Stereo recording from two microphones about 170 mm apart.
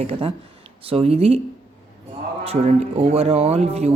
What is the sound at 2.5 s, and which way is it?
Speech, 35° right (ahead or behind).